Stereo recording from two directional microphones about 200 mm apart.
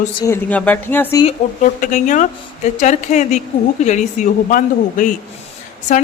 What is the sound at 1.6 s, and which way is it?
A woman's voice, 40° left (ahead or behind).